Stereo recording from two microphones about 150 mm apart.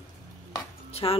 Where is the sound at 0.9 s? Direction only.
40° left (ahead or behind).